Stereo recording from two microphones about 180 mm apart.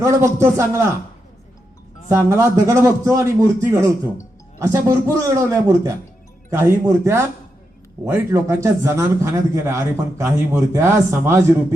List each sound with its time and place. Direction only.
0.0 s a man's voice: 15° right (ahead or behind)
2.0 s a man's voice: 15° right (ahead or behind)